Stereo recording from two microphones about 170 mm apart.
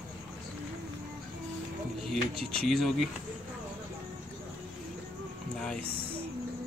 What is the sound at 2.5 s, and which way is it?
Speech, centre (ahead or behind).